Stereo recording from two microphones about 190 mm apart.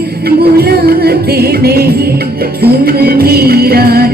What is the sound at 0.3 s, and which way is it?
Music, 55° right (ahead or behind).